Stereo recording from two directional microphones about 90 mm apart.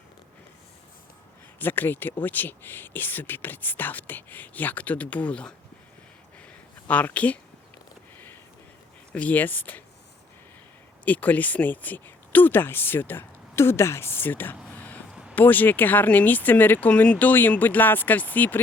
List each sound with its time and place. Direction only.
1.5 s speech: 20° left (ahead or behind)
6.4 s a sound: 15° left (ahead or behind)
9.1 s speech: 15° left (ahead or behind)
11.0 s speech: 20° left (ahead or behind)
15.1 s a sound: 10° right (ahead or behind)
15.4 s speech: 20° left (ahead or behind)